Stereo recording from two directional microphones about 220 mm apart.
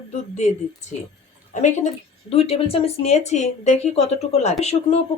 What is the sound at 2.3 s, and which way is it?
Speech, 25° left (ahead or behind).